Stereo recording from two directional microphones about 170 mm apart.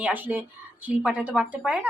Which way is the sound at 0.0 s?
10° right (ahead or behind).